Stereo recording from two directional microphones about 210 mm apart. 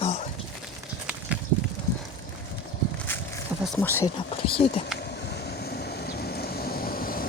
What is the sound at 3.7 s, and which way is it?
Speech, 10° left (ahead or behind).